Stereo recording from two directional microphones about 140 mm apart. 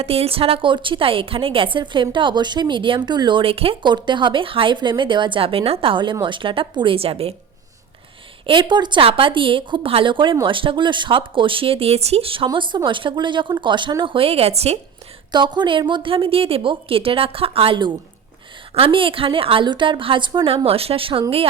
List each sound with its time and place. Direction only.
0.0 s a woman's voice: 45° right (ahead or behind)
8.4 s a woman's voice: 35° right (ahead or behind)
15.3 s a woman's voice: 30° right (ahead or behind)